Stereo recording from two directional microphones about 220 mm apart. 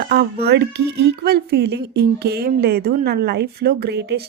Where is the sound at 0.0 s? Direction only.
45° right (ahead or behind).